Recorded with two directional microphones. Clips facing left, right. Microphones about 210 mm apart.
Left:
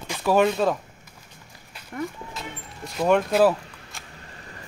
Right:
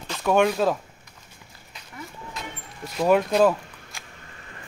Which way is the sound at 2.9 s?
Centre (ahead or behind).